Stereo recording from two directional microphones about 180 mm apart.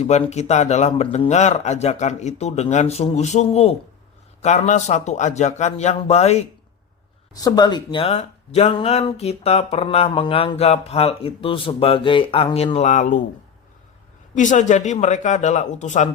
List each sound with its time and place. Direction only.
0.0 s speech: 40° left (ahead or behind)
7.3 s speech: 20° left (ahead or behind); by 13.2 s 45° left (ahead or behind)
14.3 s speech: 45° left (ahead or behind)